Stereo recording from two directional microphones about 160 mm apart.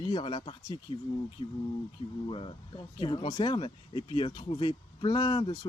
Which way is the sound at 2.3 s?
30° left (ahead or behind).